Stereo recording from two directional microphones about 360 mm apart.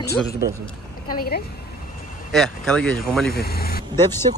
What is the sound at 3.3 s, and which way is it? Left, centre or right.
Speech, left.